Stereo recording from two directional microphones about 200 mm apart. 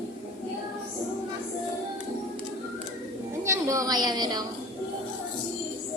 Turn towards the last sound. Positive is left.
turn(degrees=-20)  # may be behind; listen again after turning